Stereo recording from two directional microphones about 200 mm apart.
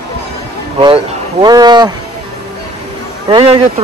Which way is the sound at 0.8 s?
20° right (ahead or behind).